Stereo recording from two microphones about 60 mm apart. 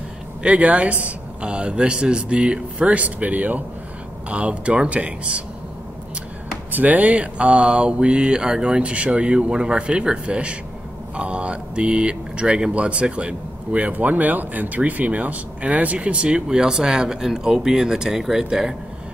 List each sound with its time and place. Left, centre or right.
0.4 s speech: right
6.7 s speech: right; by 18.8 s centre